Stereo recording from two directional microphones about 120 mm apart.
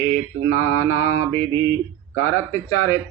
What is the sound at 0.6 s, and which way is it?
Speech, 25° left (ahead or behind).